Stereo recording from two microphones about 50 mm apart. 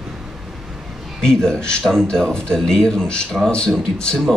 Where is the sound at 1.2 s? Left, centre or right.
Centre.